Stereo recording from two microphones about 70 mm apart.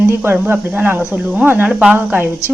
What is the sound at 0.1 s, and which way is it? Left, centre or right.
A woman's voice, right.